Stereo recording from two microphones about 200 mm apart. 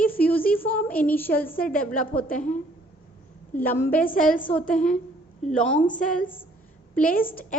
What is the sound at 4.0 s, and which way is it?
Speech, 45° left (ahead or behind).